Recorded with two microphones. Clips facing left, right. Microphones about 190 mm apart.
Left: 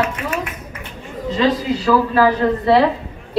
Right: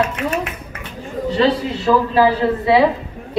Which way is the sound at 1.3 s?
30° right (ahead or behind).